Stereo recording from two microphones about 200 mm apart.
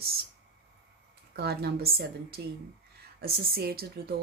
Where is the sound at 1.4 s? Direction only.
55° right (ahead or behind).